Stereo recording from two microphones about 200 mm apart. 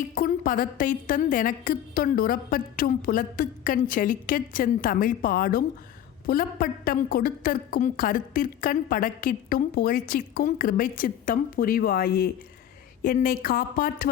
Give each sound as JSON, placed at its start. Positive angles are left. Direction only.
{"t": 0.1, "sound": "a woman's voice", "side_deg": 45}